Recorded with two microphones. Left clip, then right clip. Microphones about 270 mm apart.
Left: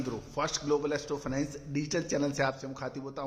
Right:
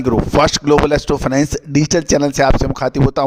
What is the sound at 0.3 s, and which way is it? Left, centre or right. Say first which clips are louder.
A man's voice: right 18 dB; right.